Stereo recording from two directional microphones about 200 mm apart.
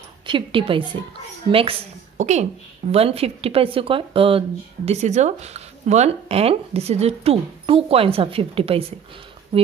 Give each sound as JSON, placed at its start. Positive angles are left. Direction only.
{"t": 0.3, "sound": "a woman's voice", "side_deg": -25}